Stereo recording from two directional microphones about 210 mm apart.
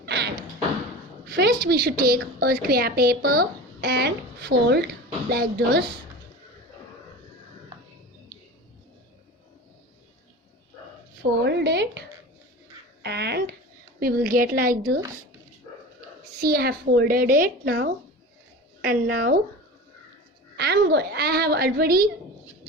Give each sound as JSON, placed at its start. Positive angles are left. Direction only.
{"t": 0.0, "sound": "thump", "side_deg": -55}
{"t": 1.6, "sound": "a woman's voice", "side_deg": -45}
{"t": 11.4, "sound": "a woman's voice", "side_deg": -55}
{"t": 13.0, "sound": "a sound", "side_deg": -50}
{"t": 14.0, "sound": "a woman's voice", "side_deg": -45}
{"t": 16.4, "sound": "a woman's voice", "side_deg": -50}
{"t": 20.6, "sound": "a woman's voice", "side_deg": -50}